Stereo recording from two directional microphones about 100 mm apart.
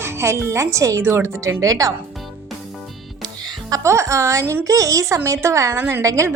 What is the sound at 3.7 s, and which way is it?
A woman's voice, 30° right (ahead or behind).